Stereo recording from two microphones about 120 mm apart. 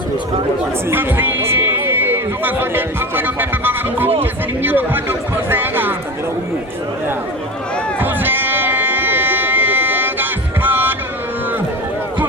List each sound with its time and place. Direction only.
0.9 s speech: 15° right (ahead or behind)
7.9 s music: 15° right (ahead or behind)